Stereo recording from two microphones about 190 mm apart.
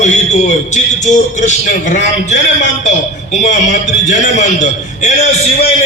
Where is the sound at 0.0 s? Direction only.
40° left (ahead or behind).